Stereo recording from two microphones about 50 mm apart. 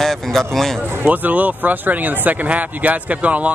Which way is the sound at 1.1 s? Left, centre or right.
Right.